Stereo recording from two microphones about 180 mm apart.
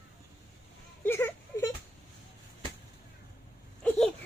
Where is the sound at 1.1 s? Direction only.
15° left (ahead or behind).